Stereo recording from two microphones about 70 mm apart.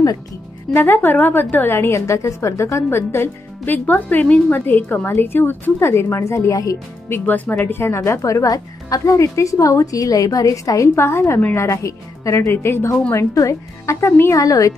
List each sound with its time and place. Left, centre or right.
0.7 s a woman's voice: left
6.3 s speech: left
7.1 s a woman's voice: left
8.2 s speech: left